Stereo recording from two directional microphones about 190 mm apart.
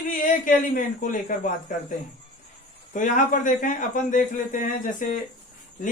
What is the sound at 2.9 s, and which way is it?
Speech, 40° left (ahead or behind).